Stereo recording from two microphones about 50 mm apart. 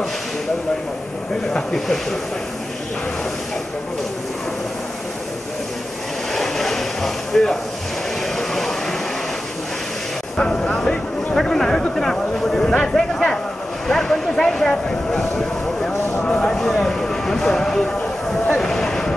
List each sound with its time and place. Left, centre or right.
1.5 s speech: centre
6.3 s a sound: centre
10.3 s vehicle: centre
11.3 s speech: centre
16.5 s speech: centre
18.6 s a sound: centre